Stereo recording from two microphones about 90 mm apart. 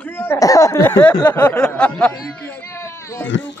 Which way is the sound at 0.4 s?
40° left (ahead or behind).